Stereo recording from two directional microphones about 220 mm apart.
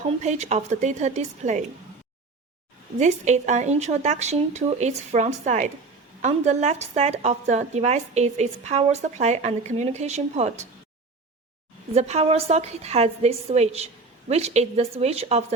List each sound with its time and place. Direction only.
0.2 s a woman's voice: 30° right (ahead or behind)
3.0 s a woman's voice: 30° right (ahead or behind)
11.9 s a woman's voice: 30° right (ahead or behind)